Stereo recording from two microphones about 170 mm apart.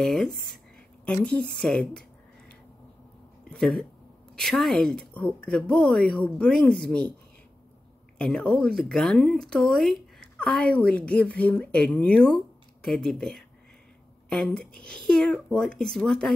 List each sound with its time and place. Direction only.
0.0 s speech: centre (ahead or behind)
3.4 s speech: 5° left (ahead or behind)
8.2 s speech: 5° left (ahead or behind)